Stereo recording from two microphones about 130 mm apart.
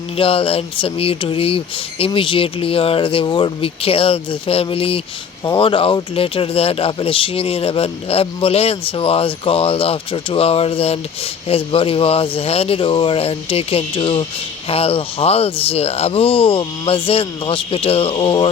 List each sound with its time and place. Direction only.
0.2 s speech: 45° left (ahead or behind)